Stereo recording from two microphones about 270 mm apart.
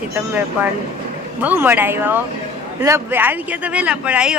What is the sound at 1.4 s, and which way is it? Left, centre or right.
Speech, centre.